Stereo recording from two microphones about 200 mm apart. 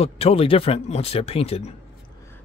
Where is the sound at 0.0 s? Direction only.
30° left (ahead or behind).